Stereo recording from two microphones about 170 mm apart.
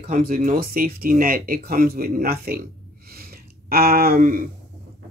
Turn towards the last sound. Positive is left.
turn(degrees=-55)  # may be behind; listen again after turning